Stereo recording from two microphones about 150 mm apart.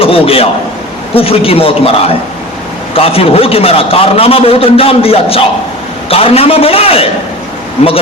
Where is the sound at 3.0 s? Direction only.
40° left (ahead or behind).